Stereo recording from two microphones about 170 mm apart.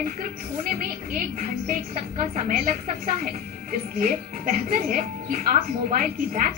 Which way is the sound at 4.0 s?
55° right (ahead or behind).